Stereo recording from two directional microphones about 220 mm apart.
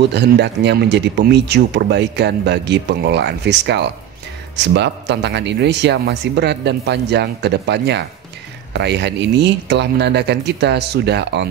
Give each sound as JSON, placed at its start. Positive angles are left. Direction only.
{"t": 0.1, "sound": "speech", "side_deg": -50}